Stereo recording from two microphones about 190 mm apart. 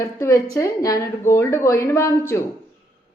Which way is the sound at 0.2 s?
15° left (ahead or behind).